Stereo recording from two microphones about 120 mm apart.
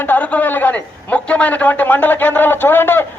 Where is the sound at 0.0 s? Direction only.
15° left (ahead or behind).